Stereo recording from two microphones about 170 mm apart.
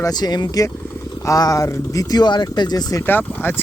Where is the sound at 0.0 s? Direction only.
25° left (ahead or behind).